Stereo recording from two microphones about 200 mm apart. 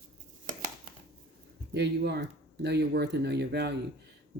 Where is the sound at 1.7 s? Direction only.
55° right (ahead or behind).